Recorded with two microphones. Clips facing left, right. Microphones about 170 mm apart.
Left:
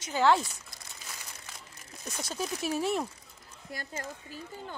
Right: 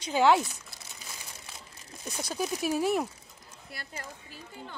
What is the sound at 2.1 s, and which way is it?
Speech, 5° right (ahead or behind).